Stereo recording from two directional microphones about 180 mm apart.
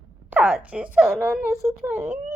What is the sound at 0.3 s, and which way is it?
Speech, 10° right (ahead or behind).